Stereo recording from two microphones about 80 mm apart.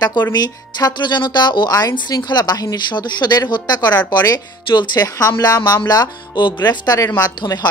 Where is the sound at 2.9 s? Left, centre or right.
Left.